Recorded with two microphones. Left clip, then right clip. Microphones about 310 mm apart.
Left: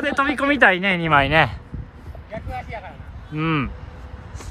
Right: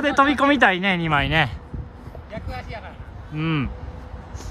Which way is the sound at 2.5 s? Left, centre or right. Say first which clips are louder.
Left 4 dB; centre.